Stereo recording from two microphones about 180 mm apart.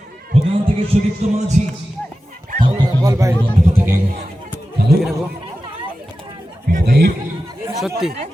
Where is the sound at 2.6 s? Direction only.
25° right (ahead or behind).